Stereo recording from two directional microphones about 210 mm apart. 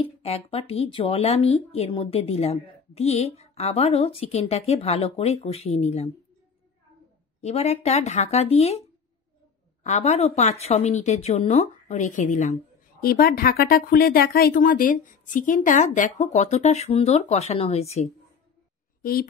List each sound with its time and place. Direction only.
0.0 s speech: 30° left (ahead or behind)
7.4 s speech: 30° left (ahead or behind)
9.8 s speech: 35° left (ahead or behind)
13.0 s speech: 45° left (ahead or behind); by 18.1 s 30° left (ahead or behind)